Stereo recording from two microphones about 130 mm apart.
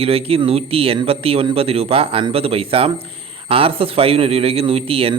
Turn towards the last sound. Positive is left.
turn(degrees=-45)  # may be behind; listen again after turning